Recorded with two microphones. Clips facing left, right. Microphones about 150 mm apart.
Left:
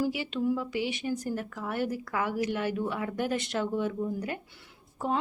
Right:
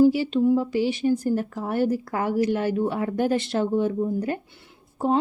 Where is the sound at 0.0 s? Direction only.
35° right (ahead or behind).